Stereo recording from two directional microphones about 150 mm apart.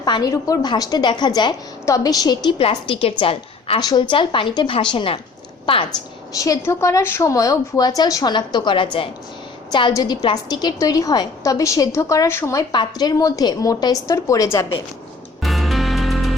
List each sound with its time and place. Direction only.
0.0 s a woman's voice: 25° left (ahead or behind)
3.8 s a woman's voice: 30° left (ahead or behind)
6.7 s a woman's voice: 20° left (ahead or behind)
12.7 s a woman's voice: 30° left (ahead or behind)
15.4 s music: centre (ahead or behind)